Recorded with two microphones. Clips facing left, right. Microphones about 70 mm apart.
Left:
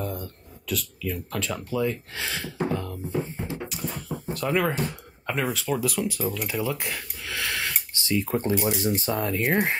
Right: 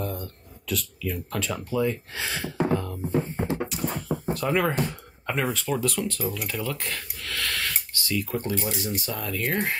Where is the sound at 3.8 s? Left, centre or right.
Right.